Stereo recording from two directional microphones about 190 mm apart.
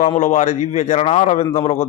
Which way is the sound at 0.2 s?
40° left (ahead or behind).